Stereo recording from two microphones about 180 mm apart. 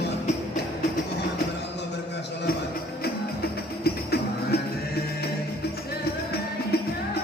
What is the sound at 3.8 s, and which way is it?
Music, 60° left (ahead or behind).